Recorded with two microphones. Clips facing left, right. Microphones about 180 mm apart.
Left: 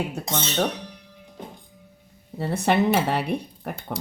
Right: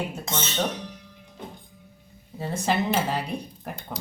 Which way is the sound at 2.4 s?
65° left (ahead or behind).